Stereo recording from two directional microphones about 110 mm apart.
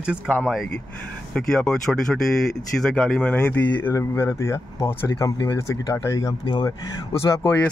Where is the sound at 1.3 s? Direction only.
5° left (ahead or behind); by 6.3 s 30° left (ahead or behind).